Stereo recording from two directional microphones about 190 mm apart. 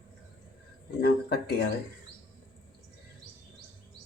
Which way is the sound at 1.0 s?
60° left (ahead or behind).